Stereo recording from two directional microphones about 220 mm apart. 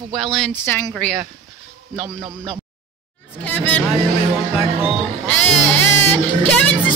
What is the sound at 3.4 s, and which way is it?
Speech, 5° left (ahead or behind).